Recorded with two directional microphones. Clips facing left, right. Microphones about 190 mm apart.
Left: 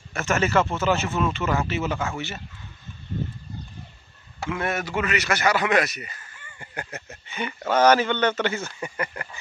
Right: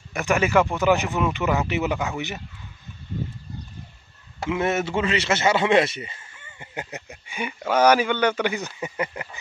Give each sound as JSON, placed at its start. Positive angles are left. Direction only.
{"t": 0.1, "sound": "speech", "side_deg": -15}
{"t": 4.5, "sound": "a man's voice", "side_deg": -25}